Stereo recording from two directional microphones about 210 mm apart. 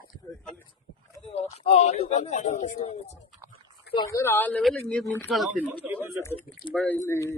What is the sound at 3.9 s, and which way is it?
Speech, 20° left (ahead or behind).